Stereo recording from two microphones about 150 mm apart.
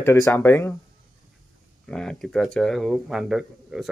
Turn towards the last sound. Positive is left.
turn(degrees=0)  # may be behind; listen again after turning